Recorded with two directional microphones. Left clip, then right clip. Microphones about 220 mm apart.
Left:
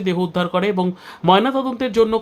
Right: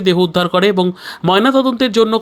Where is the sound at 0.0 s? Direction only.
25° right (ahead or behind).